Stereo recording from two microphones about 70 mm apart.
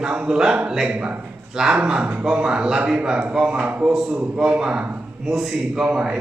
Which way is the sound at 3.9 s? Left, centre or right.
Centre.